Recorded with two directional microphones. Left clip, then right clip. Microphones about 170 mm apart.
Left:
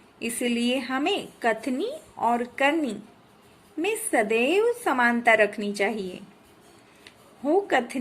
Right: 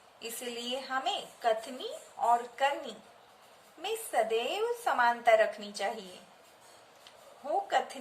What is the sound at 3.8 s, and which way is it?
A woman's voice, 40° left (ahead or behind).